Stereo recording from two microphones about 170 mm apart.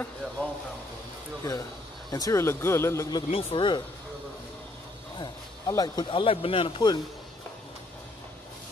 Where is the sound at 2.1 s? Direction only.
20° left (ahead or behind).